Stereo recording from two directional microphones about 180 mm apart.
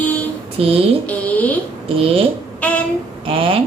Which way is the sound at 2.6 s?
5° left (ahead or behind).